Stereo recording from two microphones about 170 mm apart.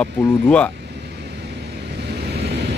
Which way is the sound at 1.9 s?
75° right (ahead or behind).